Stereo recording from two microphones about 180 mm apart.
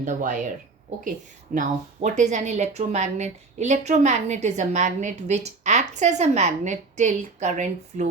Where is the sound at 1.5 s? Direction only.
45° right (ahead or behind).